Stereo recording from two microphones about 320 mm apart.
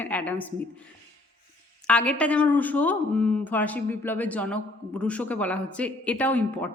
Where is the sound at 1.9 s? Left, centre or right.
Centre.